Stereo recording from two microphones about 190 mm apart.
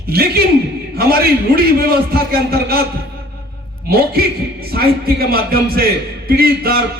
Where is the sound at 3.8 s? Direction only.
55° right (ahead or behind).